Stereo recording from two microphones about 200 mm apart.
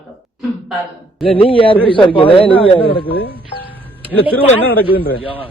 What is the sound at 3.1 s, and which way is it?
Speech, 50° left (ahead or behind).